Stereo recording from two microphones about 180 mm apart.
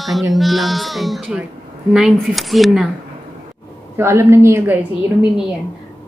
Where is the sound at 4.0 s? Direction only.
15° right (ahead or behind).